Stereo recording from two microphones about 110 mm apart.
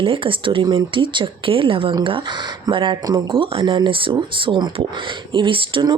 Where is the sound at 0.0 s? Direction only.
50° right (ahead or behind).